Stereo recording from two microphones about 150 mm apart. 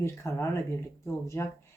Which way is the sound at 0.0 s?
20° left (ahead or behind).